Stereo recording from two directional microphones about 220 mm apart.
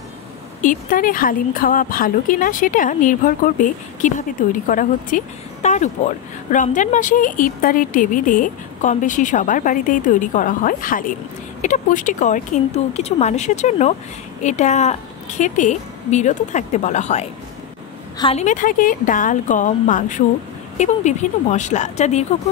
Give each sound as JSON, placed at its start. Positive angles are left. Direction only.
{"t": 0.6, "sound": "speech", "side_deg": 35}